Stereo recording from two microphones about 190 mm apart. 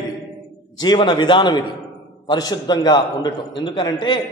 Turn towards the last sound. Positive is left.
turn(degrees=25)  # may be behind; listen again after turning